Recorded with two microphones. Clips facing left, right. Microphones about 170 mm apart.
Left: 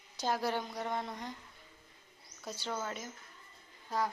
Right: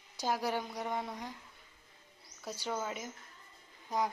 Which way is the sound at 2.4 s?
10° right (ahead or behind).